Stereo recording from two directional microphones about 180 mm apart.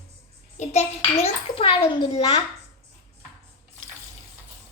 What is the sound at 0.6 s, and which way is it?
A child's voice, 40° left (ahead or behind).